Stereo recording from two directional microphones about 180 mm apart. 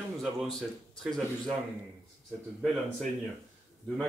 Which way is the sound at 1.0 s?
Centre (ahead or behind).